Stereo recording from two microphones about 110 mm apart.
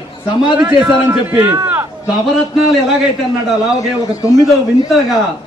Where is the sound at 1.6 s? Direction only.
20° right (ahead or behind).